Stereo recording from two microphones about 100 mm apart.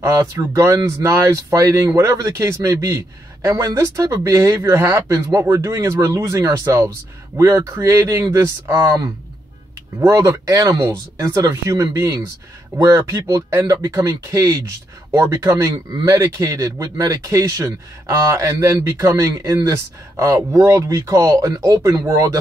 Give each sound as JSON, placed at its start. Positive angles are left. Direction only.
{"t": 0.0, "sound": "speech", "side_deg": -35}